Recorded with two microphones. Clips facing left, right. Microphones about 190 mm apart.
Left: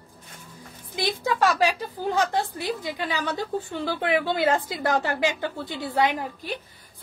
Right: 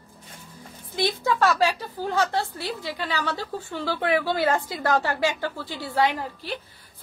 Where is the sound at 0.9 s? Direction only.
15° left (ahead or behind).